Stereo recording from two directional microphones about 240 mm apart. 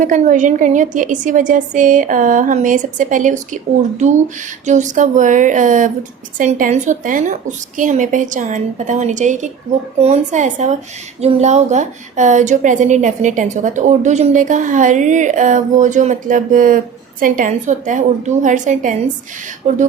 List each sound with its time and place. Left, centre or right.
0.0 s a woman's voice: right